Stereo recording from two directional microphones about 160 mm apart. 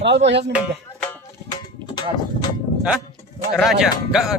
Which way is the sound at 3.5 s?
Centre (ahead or behind).